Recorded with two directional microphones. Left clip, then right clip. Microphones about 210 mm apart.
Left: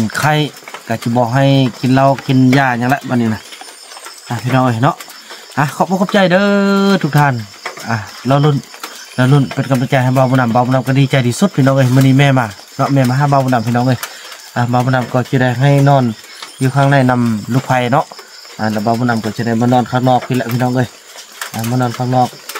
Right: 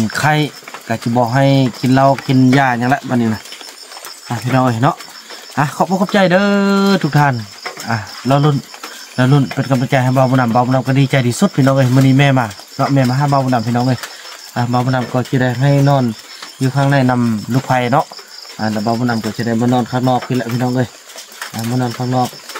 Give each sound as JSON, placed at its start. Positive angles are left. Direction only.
{"t": 0.1, "sound": "speech", "side_deg": 5}